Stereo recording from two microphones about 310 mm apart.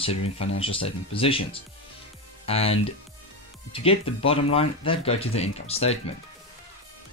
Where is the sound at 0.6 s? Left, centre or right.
Centre.